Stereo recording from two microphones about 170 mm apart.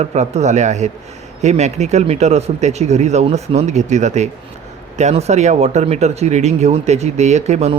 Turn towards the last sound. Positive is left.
turn(degrees=-40)  # may be behind; listen again after turning